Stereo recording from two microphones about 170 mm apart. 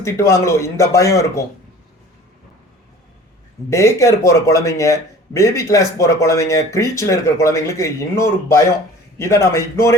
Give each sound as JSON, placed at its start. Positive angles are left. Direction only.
{"t": 0.0, "sound": "speech", "side_deg": 15}
{"t": 3.7, "sound": "speech", "side_deg": 15}